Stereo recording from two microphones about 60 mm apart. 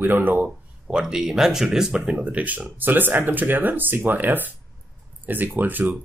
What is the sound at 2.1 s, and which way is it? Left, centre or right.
Speech, right.